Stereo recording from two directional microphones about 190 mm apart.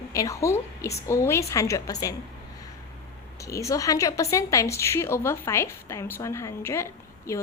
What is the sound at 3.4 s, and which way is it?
A woman's voice, 15° left (ahead or behind).